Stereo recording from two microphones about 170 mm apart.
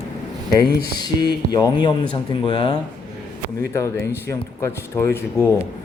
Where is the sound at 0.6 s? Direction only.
70° left (ahead or behind).